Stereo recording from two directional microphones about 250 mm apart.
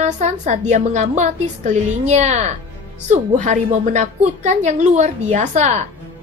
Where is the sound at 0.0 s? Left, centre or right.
Right.